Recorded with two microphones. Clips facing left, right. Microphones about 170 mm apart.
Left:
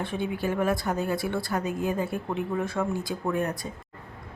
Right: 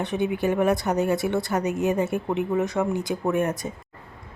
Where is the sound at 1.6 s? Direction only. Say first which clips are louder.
Right 5 dB; 80° right.